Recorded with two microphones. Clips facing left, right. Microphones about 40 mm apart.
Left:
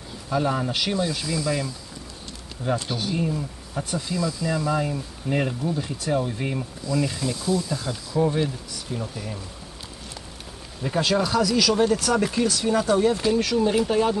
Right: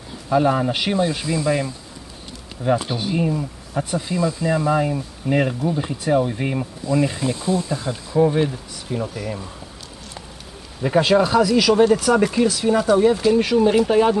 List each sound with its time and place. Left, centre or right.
0.3 s speech: centre
9.0 s speech: centre
10.8 s speech: right
13.4 s speech: centre